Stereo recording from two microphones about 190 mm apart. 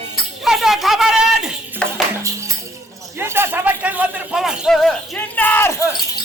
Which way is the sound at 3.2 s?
10° right (ahead or behind).